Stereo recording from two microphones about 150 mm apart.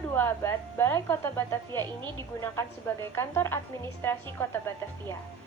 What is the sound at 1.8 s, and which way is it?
Speech, 30° right (ahead or behind).